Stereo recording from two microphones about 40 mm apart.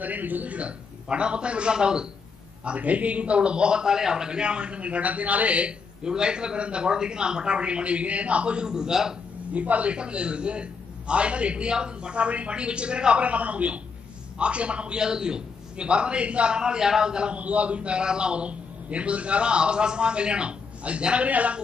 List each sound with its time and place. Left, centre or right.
0.0 s a man's voice: right
2.6 s a man's voice: right
6.0 s a man's voice: centre
9.5 s speech: right
9.9 s a man's voice: right
17.4 s a man's voice: right